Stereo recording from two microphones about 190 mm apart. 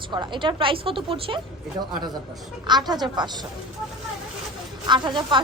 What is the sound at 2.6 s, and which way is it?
Speech, 20° right (ahead or behind).